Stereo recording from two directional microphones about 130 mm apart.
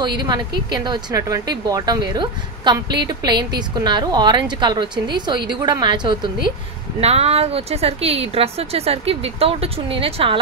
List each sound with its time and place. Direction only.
0.0 s speech: 35° right (ahead or behind)
7.0 s speech: 50° right (ahead or behind)